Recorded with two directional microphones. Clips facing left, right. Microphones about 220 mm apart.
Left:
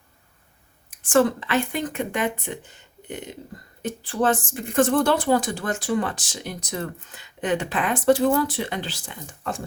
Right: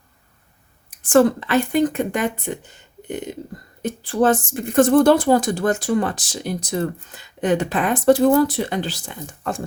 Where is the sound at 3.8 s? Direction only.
40° right (ahead or behind).